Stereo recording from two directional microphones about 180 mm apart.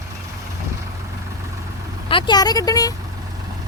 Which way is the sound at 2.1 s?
25° left (ahead or behind).